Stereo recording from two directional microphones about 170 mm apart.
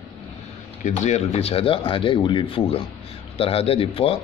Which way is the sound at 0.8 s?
40° left (ahead or behind).